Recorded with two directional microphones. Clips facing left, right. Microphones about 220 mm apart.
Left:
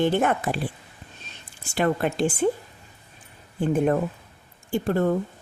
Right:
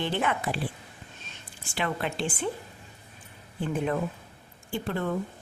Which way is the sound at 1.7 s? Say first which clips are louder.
Left 7 dB; 45° left (ahead or behind).